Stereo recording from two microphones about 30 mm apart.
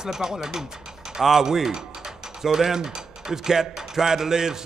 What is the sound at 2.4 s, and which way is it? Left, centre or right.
Mechanisms, centre.